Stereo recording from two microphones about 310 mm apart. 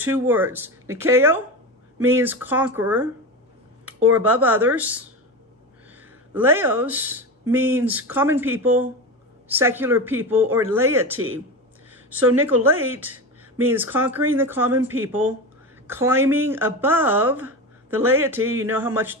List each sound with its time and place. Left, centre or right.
0.0 s speech: centre
4.1 s speech: centre
6.3 s speech: centre
11.1 s speech: right
12.4 s speech: centre
15.9 s speech: centre